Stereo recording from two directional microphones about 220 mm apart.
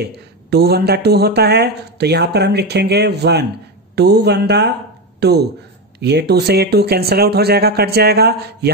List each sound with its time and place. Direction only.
0.0 s speech: 45° right (ahead or behind)